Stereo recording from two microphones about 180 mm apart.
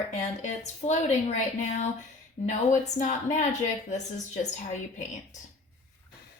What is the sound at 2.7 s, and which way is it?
Speech, 45° left (ahead or behind).